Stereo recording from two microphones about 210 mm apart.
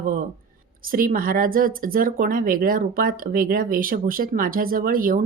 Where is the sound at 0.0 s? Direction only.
40° right (ahead or behind).